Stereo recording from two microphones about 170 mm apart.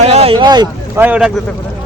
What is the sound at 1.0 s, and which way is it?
Speech, 10° right (ahead or behind).